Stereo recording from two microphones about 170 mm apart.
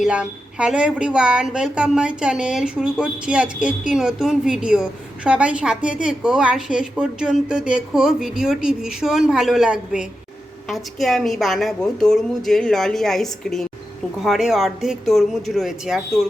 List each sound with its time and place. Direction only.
0.0 s a woman's voice: 5° right (ahead or behind)